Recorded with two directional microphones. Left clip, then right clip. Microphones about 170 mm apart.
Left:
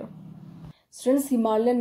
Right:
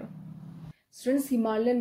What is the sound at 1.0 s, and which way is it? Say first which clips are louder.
Speech: left 5 dB; 20° left (ahead or behind).